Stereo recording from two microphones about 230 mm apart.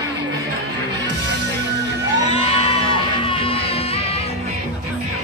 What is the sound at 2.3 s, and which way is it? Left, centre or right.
Music, left.